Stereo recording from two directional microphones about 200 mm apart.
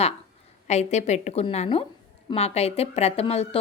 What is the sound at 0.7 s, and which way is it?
A woman's voice, 35° left (ahead or behind).